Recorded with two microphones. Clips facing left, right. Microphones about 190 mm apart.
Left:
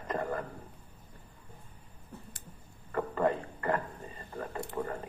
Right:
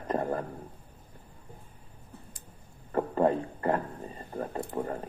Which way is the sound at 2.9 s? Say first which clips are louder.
Right 4 dB; 35° right (ahead or behind).